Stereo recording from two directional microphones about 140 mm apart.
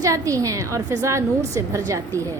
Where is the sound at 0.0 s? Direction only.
25° right (ahead or behind).